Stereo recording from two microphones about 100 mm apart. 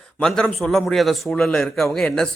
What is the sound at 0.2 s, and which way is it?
A man's voice, 5° left (ahead or behind).